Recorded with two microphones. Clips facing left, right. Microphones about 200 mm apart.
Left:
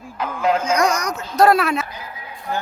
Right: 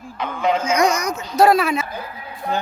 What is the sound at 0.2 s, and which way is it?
Music, 5° left (ahead or behind).